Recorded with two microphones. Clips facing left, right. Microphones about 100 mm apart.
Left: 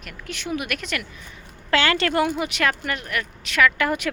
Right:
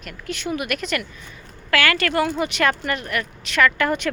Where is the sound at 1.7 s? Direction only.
25° left (ahead or behind).